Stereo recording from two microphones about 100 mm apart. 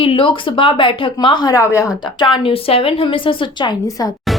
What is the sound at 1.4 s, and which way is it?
Speech, 30° left (ahead or behind).